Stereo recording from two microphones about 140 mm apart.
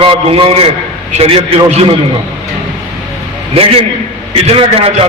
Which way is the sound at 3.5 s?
40° right (ahead or behind).